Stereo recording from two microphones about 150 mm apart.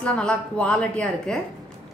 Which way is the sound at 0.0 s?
5° left (ahead or behind).